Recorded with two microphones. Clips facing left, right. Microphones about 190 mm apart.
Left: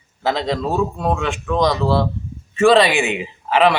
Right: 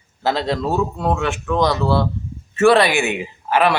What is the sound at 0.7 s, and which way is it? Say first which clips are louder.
Speech: even; 15° left (ahead or behind).